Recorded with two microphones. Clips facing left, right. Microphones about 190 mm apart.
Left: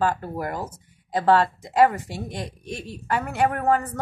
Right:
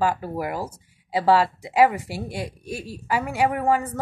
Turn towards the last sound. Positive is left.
turn(degrees=-10)  # may be behind; listen again after turning